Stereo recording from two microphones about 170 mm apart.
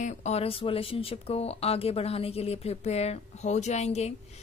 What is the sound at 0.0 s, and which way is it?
A woman's voice, 40° left (ahead or behind).